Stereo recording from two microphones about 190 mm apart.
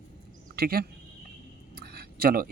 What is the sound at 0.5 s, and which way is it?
Speech, 55° right (ahead or behind).